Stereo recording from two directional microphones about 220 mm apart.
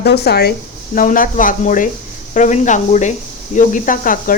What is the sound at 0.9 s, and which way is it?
Speech, 35° left (ahead or behind).